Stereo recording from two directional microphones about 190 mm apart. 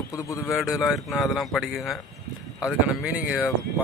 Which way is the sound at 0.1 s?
15° left (ahead or behind).